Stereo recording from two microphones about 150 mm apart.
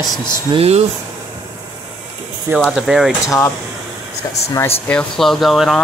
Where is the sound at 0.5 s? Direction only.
45° right (ahead or behind).